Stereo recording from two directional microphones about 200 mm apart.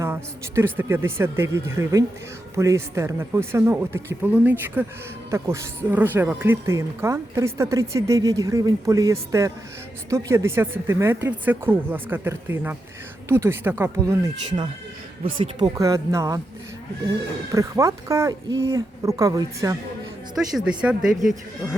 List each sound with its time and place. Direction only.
0.0 s speech: 10° right (ahead or behind); by 15.7 s 25° right (ahead or behind)
15.8 s speech: 15° right (ahead or behind)
17.5 s speech: 15° right (ahead or behind)
20.3 s speech: centre (ahead or behind)